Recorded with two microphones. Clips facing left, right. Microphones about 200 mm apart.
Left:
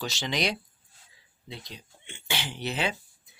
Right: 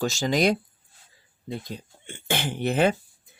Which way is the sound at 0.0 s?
45° right (ahead or behind).